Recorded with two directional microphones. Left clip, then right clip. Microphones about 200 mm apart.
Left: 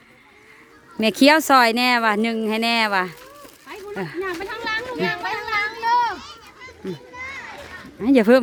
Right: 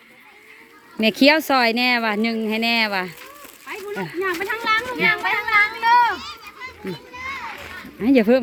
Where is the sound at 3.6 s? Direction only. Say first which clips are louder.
Right 2 dB; 10° left (ahead or behind).